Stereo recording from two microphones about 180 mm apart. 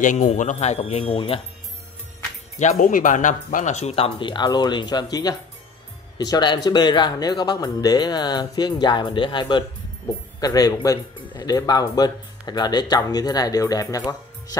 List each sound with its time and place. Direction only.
0.0 s speech: 45° left (ahead or behind)
2.6 s speech: 45° left (ahead or behind); by 14.6 s 20° left (ahead or behind)